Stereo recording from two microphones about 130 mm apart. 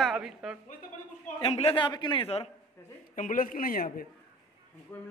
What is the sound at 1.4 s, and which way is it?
A man's voice, 45° left (ahead or behind).